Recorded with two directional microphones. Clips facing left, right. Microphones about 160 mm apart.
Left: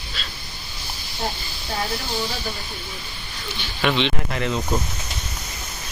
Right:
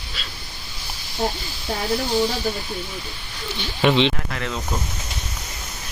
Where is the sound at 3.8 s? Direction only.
30° right (ahead or behind).